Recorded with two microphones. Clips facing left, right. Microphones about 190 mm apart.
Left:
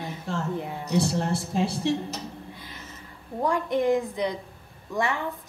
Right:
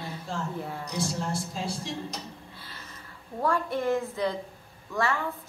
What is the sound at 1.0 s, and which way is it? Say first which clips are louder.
Speech: left 4 dB; 65° left (ahead or behind).